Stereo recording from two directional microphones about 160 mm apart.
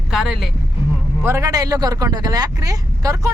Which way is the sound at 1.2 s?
20° right (ahead or behind).